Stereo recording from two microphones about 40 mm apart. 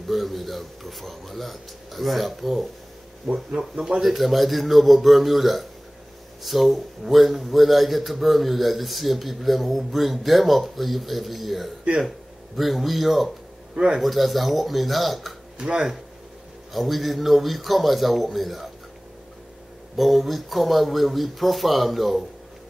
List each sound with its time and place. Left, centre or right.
0.0 s a man's voice: centre
3.5 s speech: centre
4.0 s a man's voice: centre
15.6 s speech: right
16.7 s a man's voice: centre
20.0 s a man's voice: centre